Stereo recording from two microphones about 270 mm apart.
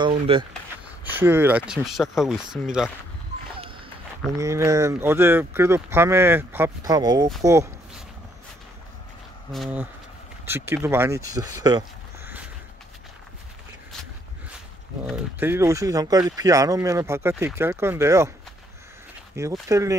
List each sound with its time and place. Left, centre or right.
0.0 s speech: centre
0.5 s speech: centre
4.4 s speech: centre
7.4 s a sound: centre
9.5 s speech: centre
15.0 s speech: centre
19.4 s speech: centre